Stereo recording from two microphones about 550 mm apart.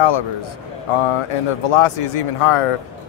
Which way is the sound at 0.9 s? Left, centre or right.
Left.